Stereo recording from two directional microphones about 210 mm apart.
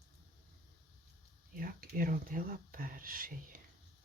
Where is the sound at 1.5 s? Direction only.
45° right (ahead or behind).